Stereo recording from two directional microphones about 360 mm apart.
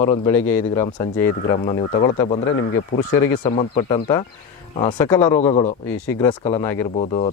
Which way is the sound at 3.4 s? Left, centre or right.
Centre.